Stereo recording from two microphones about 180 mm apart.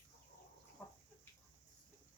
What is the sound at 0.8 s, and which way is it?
Chicken, 10° left (ahead or behind).